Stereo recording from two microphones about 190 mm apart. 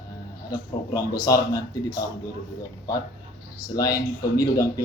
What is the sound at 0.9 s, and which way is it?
Speech, 20° left (ahead or behind).